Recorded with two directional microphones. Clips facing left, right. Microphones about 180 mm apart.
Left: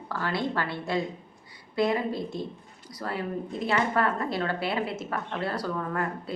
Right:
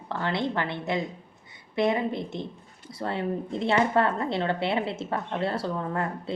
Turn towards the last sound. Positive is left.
turn(degrees=-25)  # may be behind; listen again after turning